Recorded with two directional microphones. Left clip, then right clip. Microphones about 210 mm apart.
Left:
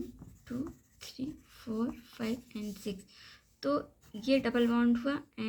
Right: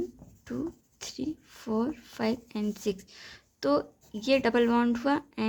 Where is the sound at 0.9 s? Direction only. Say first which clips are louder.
Right 5 dB; 55° right (ahead or behind).